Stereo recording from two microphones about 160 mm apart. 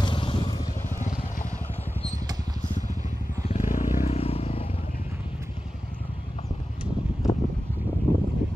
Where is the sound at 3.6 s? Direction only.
55° left (ahead or behind).